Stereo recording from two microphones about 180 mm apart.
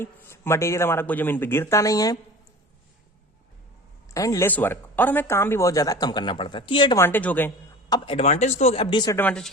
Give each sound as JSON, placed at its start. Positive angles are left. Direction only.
{"t": 0.0, "sound": "speech", "side_deg": 15}
{"t": 4.1, "sound": "speech", "side_deg": 15}
{"t": 6.9, "sound": "speech", "side_deg": 10}
{"t": 7.9, "sound": "speech", "side_deg": 25}
{"t": 9.1, "sound": "speech", "side_deg": 5}